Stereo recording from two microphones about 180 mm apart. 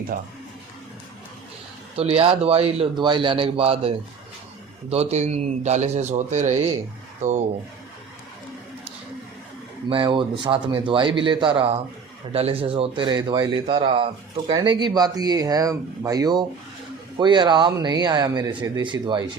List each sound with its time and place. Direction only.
0.1 s speech: 50° right (ahead or behind)
2.0 s a man's voice: 35° right (ahead or behind)
9.9 s speech: 25° right (ahead or behind)